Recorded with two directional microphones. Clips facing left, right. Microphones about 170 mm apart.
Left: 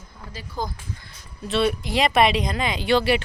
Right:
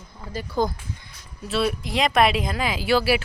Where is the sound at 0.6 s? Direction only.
65° right (ahead or behind).